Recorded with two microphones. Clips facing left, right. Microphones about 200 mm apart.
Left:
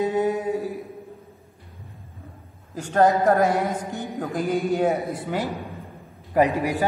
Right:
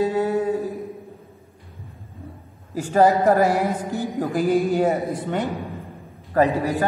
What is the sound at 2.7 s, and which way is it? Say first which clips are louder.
Speech: right 2 dB; 5° right (ahead or behind).